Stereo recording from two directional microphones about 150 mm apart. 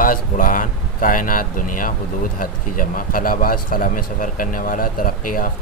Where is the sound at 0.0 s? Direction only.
65° left (ahead or behind).